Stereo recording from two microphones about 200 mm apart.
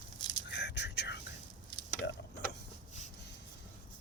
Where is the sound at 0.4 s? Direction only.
60° left (ahead or behind).